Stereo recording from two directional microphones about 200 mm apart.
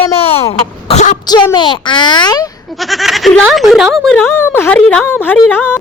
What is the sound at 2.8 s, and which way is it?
Speech, centre (ahead or behind).